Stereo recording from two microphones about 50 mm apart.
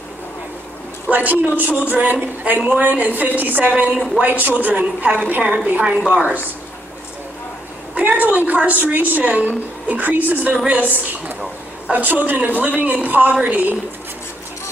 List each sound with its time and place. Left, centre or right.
1.0 s a man's voice: right
7.9 s a sound: right
8.6 s a woman's voice: right